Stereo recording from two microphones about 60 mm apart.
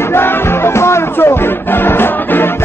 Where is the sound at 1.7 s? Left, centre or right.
Left.